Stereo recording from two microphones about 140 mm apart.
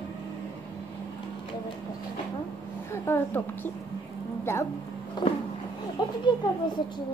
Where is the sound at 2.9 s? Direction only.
15° left (ahead or behind).